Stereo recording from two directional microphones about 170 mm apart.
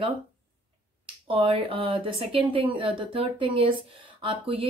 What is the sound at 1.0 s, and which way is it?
Speech, 30° right (ahead or behind).